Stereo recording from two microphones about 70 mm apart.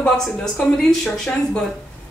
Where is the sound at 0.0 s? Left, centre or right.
Centre.